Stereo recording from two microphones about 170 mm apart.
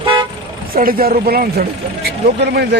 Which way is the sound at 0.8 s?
60° right (ahead or behind).